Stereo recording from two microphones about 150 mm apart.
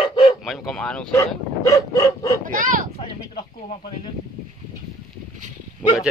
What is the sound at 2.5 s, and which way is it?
Speech, 65° right (ahead or behind).